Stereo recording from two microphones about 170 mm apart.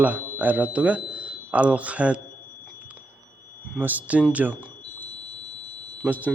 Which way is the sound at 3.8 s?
10° right (ahead or behind).